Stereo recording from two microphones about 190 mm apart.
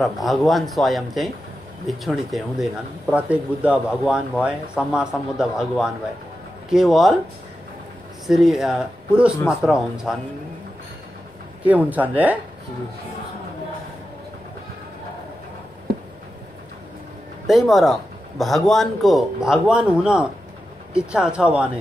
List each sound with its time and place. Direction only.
0.0 s speech: centre (ahead or behind)
8.3 s speech: centre (ahead or behind)
11.6 s speech: 10° right (ahead or behind)
17.5 s speech: centre (ahead or behind)